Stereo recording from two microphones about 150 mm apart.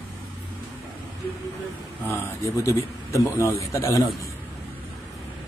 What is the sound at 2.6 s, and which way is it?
Speech, 20° left (ahead or behind).